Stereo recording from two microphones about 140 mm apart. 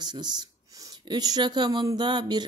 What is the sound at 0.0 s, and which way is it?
Speech, 30° right (ahead or behind).